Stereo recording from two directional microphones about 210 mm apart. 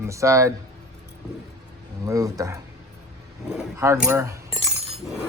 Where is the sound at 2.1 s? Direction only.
15° right (ahead or behind).